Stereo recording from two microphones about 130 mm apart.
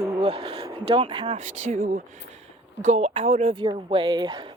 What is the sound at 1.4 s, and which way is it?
Speech, 60° right (ahead or behind).